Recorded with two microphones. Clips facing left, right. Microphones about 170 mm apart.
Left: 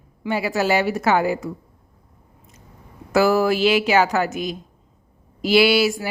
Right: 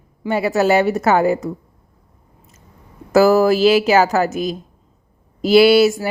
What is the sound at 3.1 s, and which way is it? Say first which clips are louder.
A woman's voice: right 5 dB; 40° right (ahead or behind).